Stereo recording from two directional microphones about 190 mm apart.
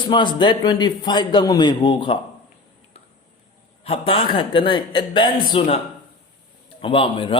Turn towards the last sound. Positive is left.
turn(degrees=30)  # may be behind; listen again after turning